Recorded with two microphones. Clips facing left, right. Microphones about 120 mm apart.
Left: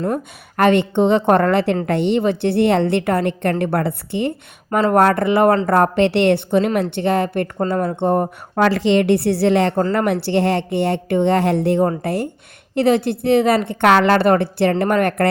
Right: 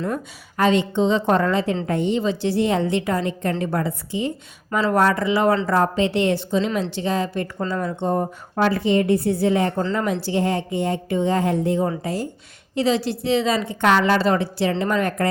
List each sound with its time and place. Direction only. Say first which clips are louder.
0.0 s a woman's voice: left 4 dB; 55° left (ahead or behind)